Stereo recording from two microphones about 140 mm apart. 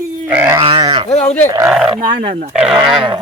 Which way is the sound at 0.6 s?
35° right (ahead or behind).